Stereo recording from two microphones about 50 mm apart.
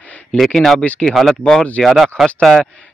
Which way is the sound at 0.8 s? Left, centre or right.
Centre.